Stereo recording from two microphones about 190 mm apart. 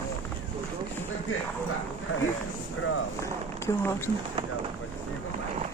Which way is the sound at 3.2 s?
15° left (ahead or behind).